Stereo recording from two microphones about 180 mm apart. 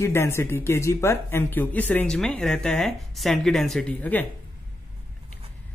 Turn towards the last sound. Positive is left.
turn(degrees=10)  # may be behind; listen again after turning